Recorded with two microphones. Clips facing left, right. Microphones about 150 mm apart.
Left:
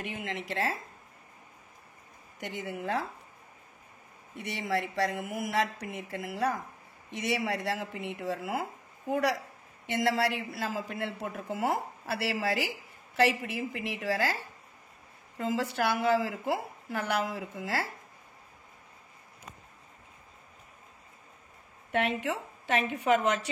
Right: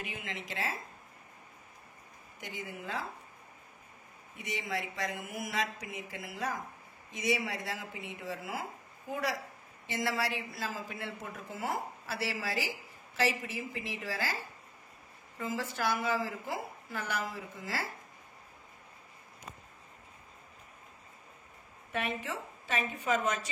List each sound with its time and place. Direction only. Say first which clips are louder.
0.1 s speech: left 6 dB; 55° left (ahead or behind)
2.4 s speech: left 7 dB; 65° left (ahead or behind)
4.4 s a woman's voice: left 5 dB; 70° left (ahead or behind)
21.9 s a woman's voice: left 6 dB; 70° left (ahead or behind)